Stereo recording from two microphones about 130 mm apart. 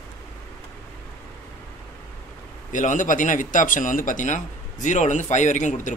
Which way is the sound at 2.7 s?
85° left.